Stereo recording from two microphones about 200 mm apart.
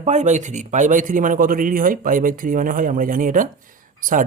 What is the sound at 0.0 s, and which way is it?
Speech, 35° right (ahead or behind).